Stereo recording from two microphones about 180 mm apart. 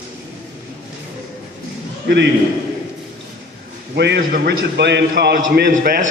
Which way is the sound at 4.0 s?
70° right (ahead or behind).